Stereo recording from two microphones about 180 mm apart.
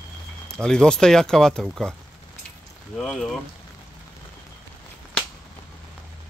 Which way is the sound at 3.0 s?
5° left (ahead or behind).